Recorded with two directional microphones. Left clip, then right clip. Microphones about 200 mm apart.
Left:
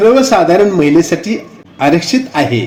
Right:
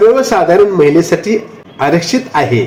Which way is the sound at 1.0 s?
25° left (ahead or behind).